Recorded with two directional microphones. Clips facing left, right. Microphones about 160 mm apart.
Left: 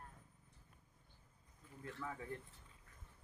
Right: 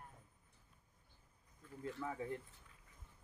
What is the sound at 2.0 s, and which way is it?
Speech, 20° right (ahead or behind).